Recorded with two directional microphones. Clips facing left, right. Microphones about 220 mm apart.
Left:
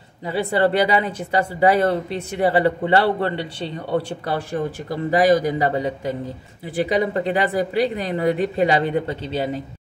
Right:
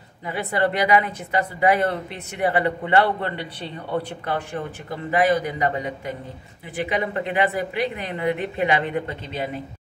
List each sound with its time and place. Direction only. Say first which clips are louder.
0.3 s speech: left 4 dB; 30° left (ahead or behind)
4.8 s speech: left 3 dB; 35° left (ahead or behind)